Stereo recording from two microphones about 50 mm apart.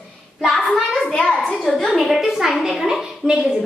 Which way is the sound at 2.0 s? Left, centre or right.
Centre.